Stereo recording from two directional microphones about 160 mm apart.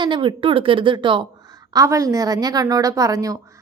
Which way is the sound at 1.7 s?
20° right (ahead or behind).